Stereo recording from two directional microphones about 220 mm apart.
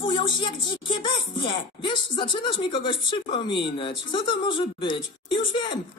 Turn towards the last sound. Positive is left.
turn(degrees=20)  # may be behind; listen again after turning